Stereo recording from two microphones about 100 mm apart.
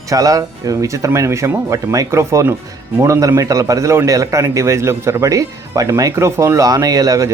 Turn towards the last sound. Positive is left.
turn(degrees=-35)  # may be behind; listen again after turning